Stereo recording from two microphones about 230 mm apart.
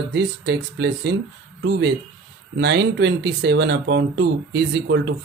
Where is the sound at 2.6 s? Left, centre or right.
Right.